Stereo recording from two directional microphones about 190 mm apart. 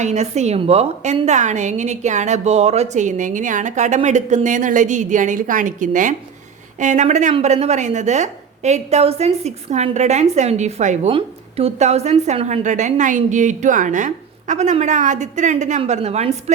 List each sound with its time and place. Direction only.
0.0 s a woman's voice: 35° right (ahead or behind)